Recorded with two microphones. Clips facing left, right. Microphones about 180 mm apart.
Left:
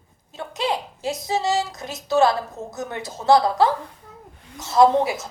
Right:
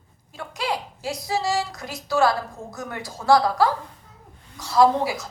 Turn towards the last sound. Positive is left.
turn(degrees=25)  # may be behind; listen again after turning